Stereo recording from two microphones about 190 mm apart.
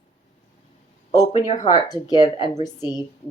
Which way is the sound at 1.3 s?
35° left (ahead or behind).